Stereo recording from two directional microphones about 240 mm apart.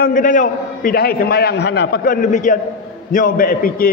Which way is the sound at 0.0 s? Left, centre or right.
Left.